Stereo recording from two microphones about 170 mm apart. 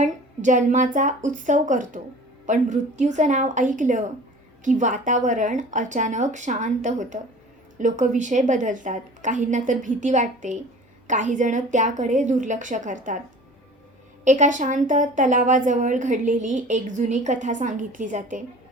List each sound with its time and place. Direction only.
0.0 s a woman's voice: 45° right (ahead or behind)
14.3 s a woman's voice: 45° right (ahead or behind)